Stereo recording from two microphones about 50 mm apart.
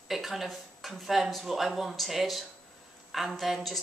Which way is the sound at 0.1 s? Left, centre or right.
Centre.